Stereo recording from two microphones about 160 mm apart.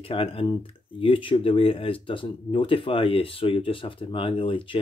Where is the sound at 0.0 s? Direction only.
35° left (ahead or behind).